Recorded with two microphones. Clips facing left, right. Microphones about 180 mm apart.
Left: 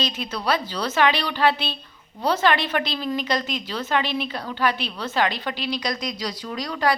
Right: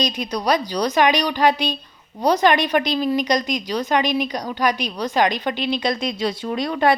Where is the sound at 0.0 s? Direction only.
15° right (ahead or behind).